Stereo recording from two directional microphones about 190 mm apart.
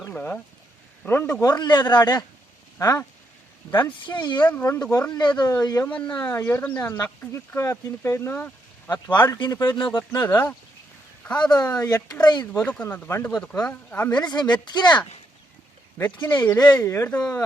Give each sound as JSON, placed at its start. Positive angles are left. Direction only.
{"t": 0.1, "sound": "speech", "side_deg": 10}
{"t": 4.1, "sound": "speech", "side_deg": 25}
{"t": 4.4, "sound": "speech", "side_deg": 10}
{"t": 9.2, "sound": "speech", "side_deg": 20}
{"t": 10.0, "sound": "speech", "side_deg": 10}
{"t": 11.5, "sound": "speech", "side_deg": 20}
{"t": 12.6, "sound": "speech", "side_deg": 10}
{"t": 14.1, "sound": "speech", "side_deg": 20}
{"t": 16.3, "sound": "speech", "side_deg": 20}